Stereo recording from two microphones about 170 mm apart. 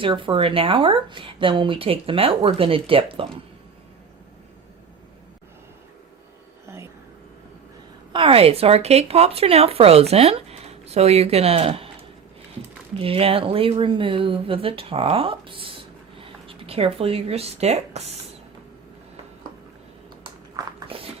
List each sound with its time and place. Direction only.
0.0 s speech: 30° right (ahead or behind)
8.1 s speech: 30° right (ahead or behind)
13.0 s speech: 35° right (ahead or behind)
20.7 s dog: 35° right (ahead or behind)